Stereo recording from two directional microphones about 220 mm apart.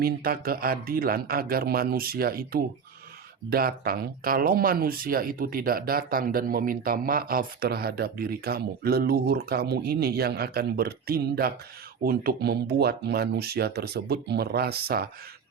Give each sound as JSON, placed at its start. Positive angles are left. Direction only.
{"t": 0.0, "sound": "speech", "side_deg": -45}